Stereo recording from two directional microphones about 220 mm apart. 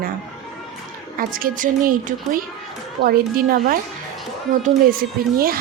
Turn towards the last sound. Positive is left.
turn(degrees=-40)  # may be behind; listen again after turning